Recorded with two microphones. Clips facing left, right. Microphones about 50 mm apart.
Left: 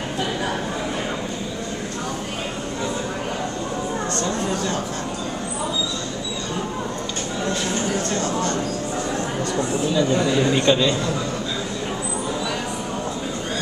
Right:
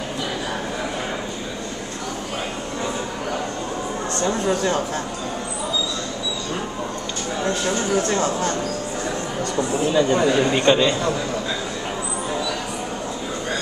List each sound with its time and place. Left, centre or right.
9.8 s speech: right
10.4 s a man's voice: centre